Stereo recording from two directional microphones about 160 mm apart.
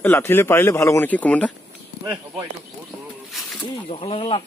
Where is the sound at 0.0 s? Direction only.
15° left (ahead or behind).